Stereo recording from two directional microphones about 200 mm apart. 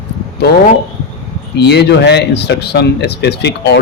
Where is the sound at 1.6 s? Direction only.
55° left (ahead or behind).